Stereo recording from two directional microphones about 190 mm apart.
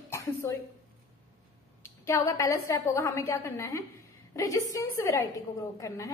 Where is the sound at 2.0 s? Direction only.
15° left (ahead or behind).